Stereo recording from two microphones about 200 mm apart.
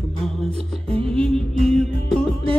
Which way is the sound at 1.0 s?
30° right (ahead or behind).